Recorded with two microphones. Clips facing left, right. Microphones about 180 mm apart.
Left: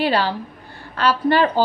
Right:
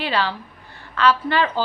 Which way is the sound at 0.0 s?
40° left (ahead or behind).